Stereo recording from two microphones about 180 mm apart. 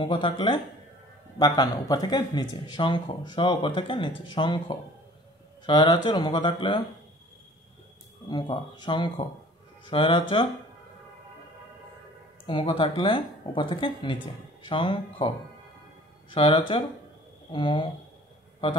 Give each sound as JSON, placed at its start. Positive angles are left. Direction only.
{"t": 0.0, "sound": "speech", "side_deg": 25}
{"t": 8.3, "sound": "speech", "side_deg": 25}
{"t": 12.4, "sound": "speech", "side_deg": 30}